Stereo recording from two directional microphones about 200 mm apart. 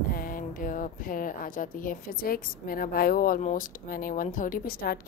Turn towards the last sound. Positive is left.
turn(degrees=50)  # may be behind; listen again after turning